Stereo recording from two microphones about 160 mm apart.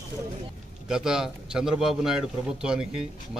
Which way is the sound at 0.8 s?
5° right (ahead or behind).